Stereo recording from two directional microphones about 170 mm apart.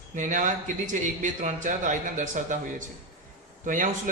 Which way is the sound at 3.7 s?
50° right (ahead or behind).